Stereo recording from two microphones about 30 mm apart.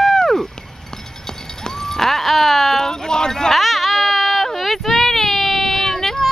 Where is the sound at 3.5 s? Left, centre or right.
Centre.